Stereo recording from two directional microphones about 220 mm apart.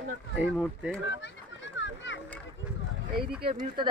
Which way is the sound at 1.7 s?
55° left (ahead or behind).